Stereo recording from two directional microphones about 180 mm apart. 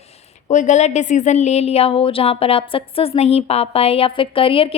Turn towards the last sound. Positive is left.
turn(degrees=30)  # may be behind; listen again after turning